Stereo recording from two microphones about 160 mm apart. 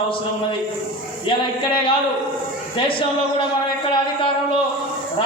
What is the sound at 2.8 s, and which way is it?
Speech, 30° left (ahead or behind).